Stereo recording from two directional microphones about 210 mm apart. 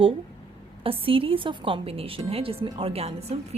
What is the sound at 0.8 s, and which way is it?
Speech, 25° right (ahead or behind).